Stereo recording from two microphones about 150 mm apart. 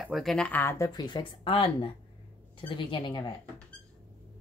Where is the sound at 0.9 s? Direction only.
30° left (ahead or behind).